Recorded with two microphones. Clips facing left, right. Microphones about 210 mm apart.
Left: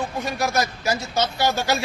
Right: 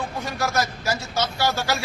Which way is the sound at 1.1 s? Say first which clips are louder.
Left 2 dB; 20° left (ahead or behind).